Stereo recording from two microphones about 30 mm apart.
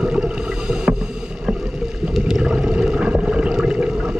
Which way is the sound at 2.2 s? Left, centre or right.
Centre.